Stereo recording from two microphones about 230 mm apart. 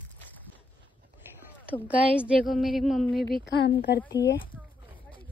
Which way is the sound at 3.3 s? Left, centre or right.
Left.